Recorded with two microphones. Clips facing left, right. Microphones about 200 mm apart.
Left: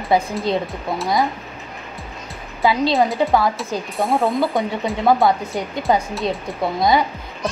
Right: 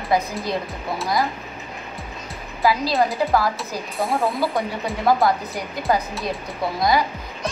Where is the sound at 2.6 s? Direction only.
25° left (ahead or behind).